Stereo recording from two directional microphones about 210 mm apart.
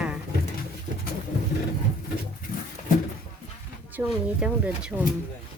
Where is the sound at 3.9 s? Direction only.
5° right (ahead or behind).